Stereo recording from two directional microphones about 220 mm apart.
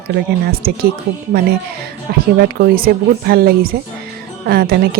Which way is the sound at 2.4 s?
45° right (ahead or behind).